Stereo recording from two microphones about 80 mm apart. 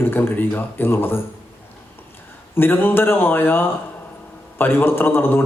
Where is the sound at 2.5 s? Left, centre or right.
Left.